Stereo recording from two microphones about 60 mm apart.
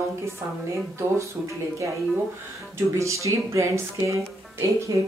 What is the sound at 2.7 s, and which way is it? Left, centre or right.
A woman's voice, right.